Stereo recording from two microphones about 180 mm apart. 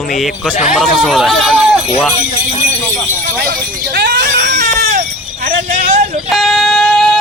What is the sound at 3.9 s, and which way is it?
Screaming, 60° right (ahead or behind).